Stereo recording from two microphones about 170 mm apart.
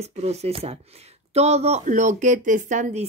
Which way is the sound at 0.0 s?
40° right (ahead or behind).